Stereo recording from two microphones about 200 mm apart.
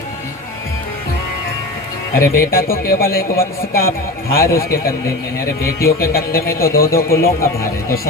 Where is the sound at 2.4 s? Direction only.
45° left (ahead or behind).